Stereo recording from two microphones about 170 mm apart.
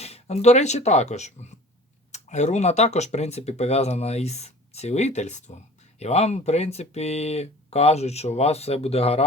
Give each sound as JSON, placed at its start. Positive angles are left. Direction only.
{"t": 0.0, "sound": "speech", "side_deg": 40}